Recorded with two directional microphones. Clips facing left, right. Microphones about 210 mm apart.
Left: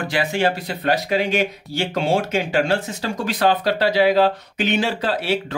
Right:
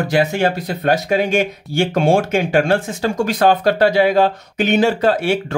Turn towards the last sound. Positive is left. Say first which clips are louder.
# right 6 dB
turn(degrees=-50)  # may be behind; listen again after turning